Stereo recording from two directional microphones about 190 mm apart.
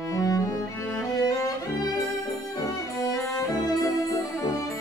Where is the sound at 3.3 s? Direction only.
15° left (ahead or behind).